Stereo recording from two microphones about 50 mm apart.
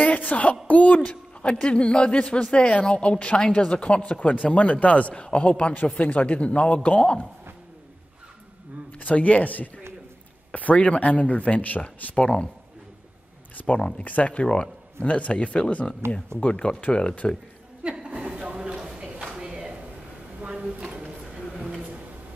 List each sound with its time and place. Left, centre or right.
0.0 s a sound: left
0.7 s speech: left
8.9 s speech: left
13.6 s speech: left
17.9 s a sound: centre
20.4 s drawer open or close: right